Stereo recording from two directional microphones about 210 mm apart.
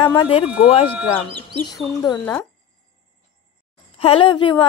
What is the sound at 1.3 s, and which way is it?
Chicken, 50° right (ahead or behind).